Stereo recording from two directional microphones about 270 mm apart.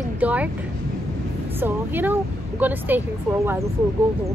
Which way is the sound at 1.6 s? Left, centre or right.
Centre.